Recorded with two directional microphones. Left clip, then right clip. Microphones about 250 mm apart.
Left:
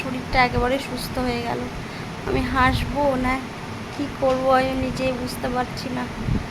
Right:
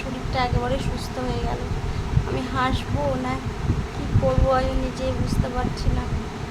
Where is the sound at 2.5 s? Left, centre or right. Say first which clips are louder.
Left 5 dB; left.